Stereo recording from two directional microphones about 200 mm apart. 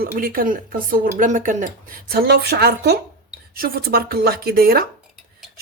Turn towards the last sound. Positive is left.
turn(degrees=-50)  # may be behind; listen again after turning